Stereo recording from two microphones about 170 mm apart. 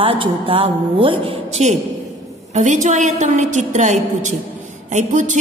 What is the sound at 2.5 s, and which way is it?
A woman's voice, 45° right (ahead or behind).